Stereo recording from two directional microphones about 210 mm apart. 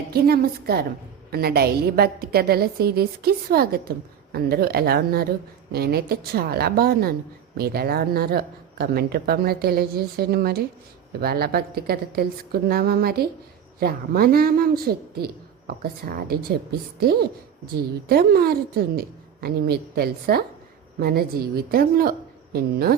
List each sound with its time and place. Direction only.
0.1 s a woman's voice: 45° right (ahead or behind)